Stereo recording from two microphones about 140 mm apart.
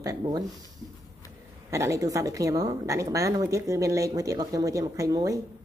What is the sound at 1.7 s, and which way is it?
Speech, 20° right (ahead or behind).